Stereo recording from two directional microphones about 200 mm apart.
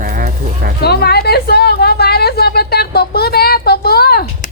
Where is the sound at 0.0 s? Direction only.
45° right (ahead or behind).